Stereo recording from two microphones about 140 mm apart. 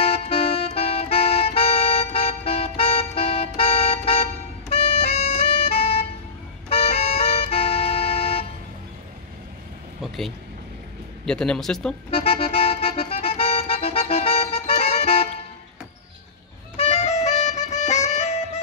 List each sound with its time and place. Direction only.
0.0 s music: 45° left (ahead or behind)
11.2 s speech: 5° left (ahead or behind)
12.1 s music: 45° left (ahead or behind)
16.7 s music: 55° left (ahead or behind)